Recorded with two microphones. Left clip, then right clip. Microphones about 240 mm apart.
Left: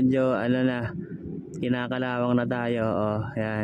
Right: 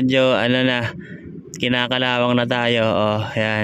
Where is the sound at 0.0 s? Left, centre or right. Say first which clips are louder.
Right 7 dB; right.